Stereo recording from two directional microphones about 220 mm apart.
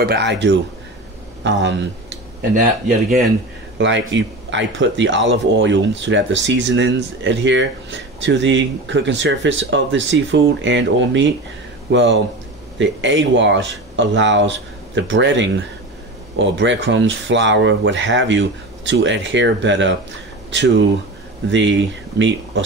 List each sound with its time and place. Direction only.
0.0 s speech: 50° right (ahead or behind)
3.7 s speech: 55° right (ahead or behind)